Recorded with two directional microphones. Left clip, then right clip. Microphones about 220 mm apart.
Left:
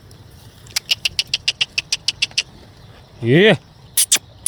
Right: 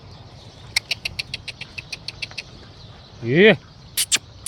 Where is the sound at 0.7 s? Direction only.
25° left (ahead or behind).